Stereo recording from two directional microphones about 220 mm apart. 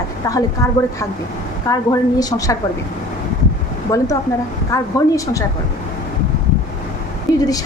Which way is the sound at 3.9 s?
15° left (ahead or behind).